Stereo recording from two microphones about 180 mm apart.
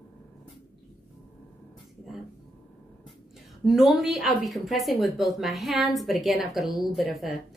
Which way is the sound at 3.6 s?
Centre (ahead or behind).